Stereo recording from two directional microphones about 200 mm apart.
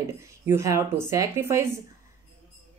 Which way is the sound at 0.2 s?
15° right (ahead or behind).